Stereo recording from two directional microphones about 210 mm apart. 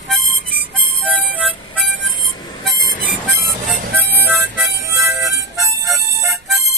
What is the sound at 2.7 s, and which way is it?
Harmonica, 45° left (ahead or behind).